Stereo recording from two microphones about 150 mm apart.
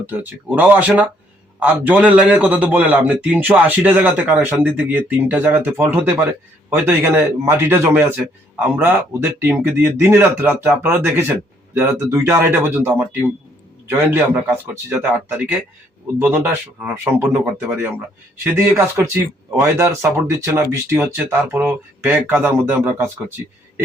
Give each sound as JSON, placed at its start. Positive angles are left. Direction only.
{"t": 0.0, "sound": "speech", "side_deg": -10}
{"t": 9.4, "sound": "speech", "side_deg": -15}